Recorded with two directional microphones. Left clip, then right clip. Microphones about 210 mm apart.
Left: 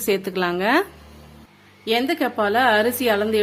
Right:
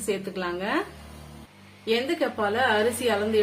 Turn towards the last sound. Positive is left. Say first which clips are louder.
# left 5 dB
turn(degrees=50)  # may be behind; listen again after turning